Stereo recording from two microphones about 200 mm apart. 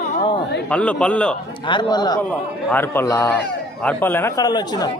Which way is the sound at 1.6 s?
25° left (ahead or behind).